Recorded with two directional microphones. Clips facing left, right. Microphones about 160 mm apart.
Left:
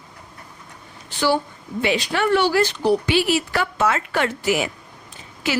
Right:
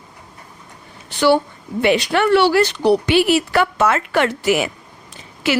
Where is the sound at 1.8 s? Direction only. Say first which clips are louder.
Right 5 dB; 60° right (ahead or behind).